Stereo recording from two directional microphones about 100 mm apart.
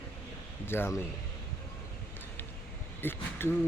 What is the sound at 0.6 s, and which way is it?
Speech, 25° left (ahead or behind).